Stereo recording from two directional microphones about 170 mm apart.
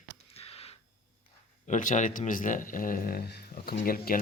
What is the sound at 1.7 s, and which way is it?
Speech, 45° left (ahead or behind).